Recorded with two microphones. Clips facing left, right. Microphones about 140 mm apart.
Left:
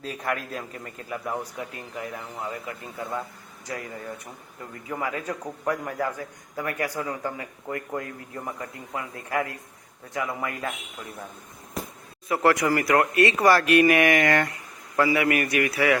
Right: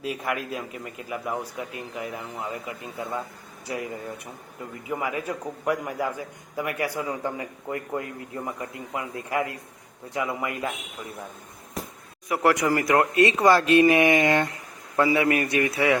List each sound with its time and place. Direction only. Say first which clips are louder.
0.0 s a man's voice: right 1 dB; 10° right (ahead or behind)
4.9 s a man's voice: right 1 dB; 15° right (ahead or behind)
12.3 s speech: even; 15° right (ahead or behind)